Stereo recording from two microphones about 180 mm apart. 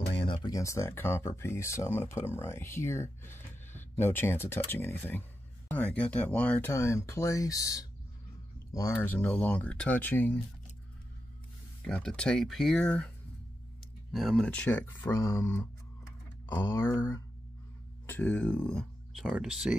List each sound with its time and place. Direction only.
0.1 s speech: 30° left (ahead or behind); by 10.4 s 10° left (ahead or behind)
11.8 s speech: 5° left (ahead or behind)
14.1 s speech: centre (ahead or behind)
16.4 s speech: 15° left (ahead or behind); by 19.7 s 5° right (ahead or behind)